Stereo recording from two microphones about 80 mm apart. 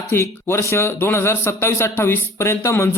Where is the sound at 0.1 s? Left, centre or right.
Left.